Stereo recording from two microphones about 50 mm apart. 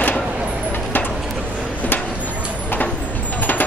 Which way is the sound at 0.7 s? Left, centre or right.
Left.